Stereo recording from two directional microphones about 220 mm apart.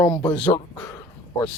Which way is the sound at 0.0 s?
10° left (ahead or behind).